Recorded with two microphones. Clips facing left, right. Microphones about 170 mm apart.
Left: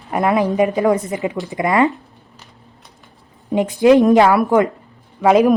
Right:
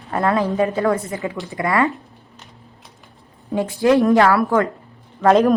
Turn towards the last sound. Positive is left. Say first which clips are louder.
# left 1 dB
turn(degrees=10)  # may be behind; listen again after turning